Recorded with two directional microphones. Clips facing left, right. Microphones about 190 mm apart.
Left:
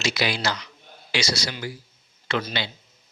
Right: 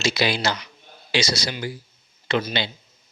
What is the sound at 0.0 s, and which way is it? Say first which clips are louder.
A man's voice: right 3 dB; 25° right (ahead or behind).